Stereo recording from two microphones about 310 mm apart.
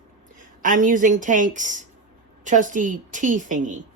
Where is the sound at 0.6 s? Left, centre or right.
Right.